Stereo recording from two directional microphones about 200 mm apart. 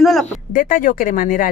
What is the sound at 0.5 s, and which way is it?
Speech, 40° left (ahead or behind).